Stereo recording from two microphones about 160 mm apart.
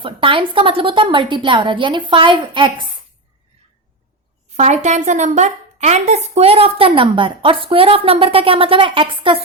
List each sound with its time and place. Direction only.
0.0 s a woman's voice: 35° right (ahead or behind)
4.5 s a woman's voice: 45° right (ahead or behind)